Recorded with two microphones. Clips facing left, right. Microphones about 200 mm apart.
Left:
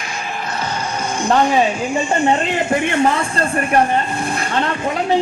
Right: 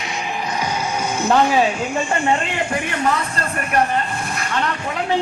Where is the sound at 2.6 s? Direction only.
25° left (ahead or behind).